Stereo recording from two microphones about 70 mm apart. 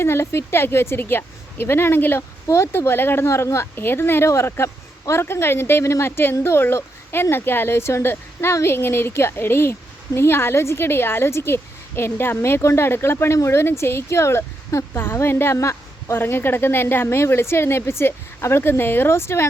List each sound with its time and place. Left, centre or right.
0.0 s a woman's voice: left